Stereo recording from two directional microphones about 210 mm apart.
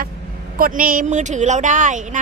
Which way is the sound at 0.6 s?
40° right (ahead or behind).